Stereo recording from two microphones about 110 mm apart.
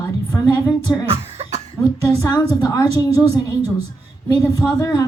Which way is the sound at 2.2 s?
40° left (ahead or behind).